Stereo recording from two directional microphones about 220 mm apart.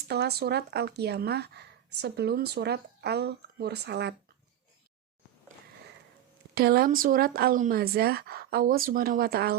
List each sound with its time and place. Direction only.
0.1 s speech: 45° right (ahead or behind)
6.5 s speech: 45° right (ahead or behind)